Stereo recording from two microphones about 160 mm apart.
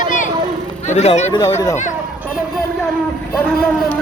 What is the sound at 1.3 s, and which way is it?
Speech, 20° left (ahead or behind).